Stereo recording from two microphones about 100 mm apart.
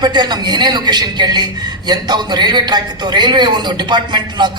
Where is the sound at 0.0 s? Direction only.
45° right (ahead or behind).